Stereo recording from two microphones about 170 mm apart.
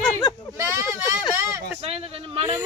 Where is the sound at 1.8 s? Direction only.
35° right (ahead or behind).